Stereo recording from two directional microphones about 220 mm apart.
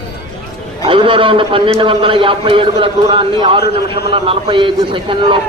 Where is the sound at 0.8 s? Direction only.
25° right (ahead or behind).